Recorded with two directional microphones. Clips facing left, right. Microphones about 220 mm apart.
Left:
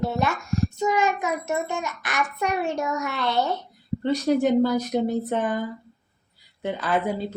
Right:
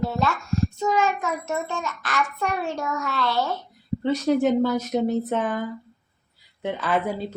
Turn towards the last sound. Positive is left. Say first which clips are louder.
# even
turn(degrees=0)  # may be behind; listen again after turning